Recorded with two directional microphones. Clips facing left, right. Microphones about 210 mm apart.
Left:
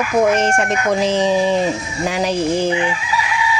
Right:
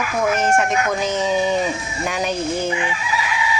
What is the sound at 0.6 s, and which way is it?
Speech, 30° left (ahead or behind).